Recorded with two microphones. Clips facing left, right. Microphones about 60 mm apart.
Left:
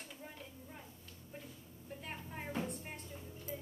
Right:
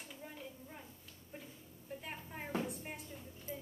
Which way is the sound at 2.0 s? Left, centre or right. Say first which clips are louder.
Left 2 dB; centre.